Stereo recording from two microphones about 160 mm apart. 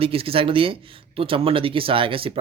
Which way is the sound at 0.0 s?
35° right (ahead or behind).